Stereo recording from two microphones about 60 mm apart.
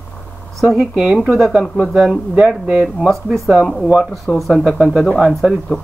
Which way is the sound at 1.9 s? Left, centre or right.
Centre.